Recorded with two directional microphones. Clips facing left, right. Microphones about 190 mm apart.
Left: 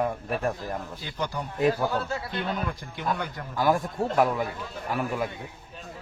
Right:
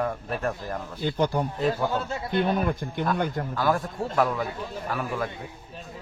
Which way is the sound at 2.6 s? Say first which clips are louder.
Right 6 dB; 55° right (ahead or behind).